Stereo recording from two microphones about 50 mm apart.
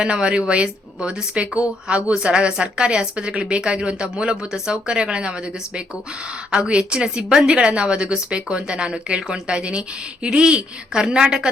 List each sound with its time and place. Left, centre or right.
0.0 s a woman's voice: right